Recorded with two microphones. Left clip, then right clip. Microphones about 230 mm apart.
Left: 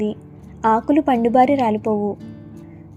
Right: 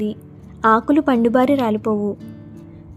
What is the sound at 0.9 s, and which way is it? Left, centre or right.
A woman's voice, centre.